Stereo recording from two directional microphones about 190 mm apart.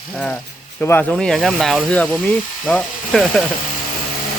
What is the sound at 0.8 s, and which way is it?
Speech, 5° left (ahead or behind).